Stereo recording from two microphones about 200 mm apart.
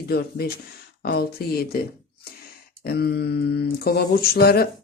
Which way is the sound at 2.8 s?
50° left (ahead or behind).